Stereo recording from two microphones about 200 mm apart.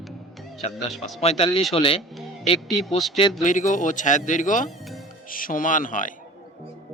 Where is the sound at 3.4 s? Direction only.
40° left (ahead or behind).